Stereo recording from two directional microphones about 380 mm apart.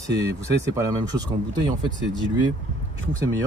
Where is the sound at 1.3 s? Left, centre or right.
Centre.